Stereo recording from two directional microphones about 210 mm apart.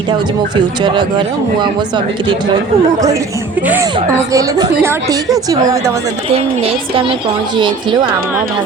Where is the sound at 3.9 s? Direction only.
20° right (ahead or behind).